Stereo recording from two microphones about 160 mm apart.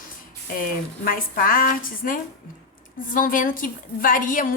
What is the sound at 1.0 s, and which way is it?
A woman's voice, 65° left (ahead or behind).